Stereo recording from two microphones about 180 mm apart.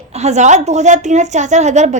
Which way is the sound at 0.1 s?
40° right (ahead or behind).